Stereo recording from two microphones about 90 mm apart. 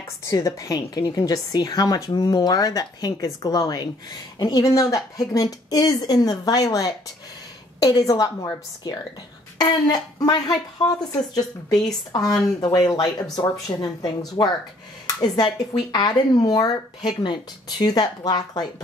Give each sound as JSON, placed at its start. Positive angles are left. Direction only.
{"t": 0.2, "sound": "a woman's voice", "side_deg": 35}